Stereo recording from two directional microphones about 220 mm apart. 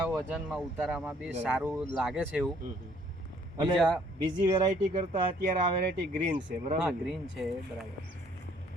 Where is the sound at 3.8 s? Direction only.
5° left (ahead or behind).